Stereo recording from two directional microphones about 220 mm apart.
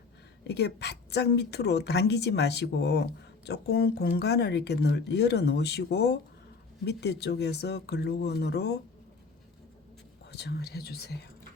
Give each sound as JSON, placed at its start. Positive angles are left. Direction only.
{"t": 0.4, "sound": "a woman's voice", "side_deg": 50}
{"t": 10.3, "sound": "a woman's voice", "side_deg": 50}